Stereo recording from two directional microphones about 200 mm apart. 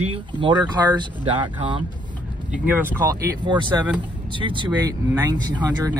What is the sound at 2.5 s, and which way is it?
Speech, 10° right (ahead or behind).